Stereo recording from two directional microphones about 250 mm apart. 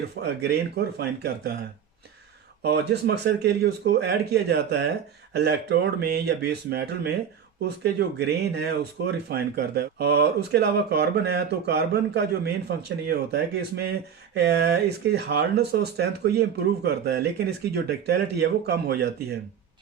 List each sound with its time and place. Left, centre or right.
0.2 s speech: right
2.6 s speech: right